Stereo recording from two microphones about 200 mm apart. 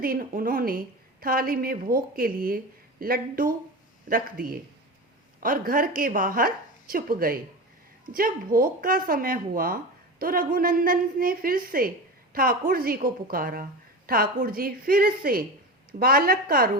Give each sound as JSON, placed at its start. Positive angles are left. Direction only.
{"t": 0.0, "sound": "speech", "side_deg": -45}